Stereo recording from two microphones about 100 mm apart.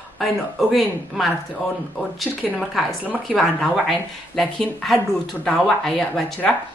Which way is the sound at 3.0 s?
15° right (ahead or behind).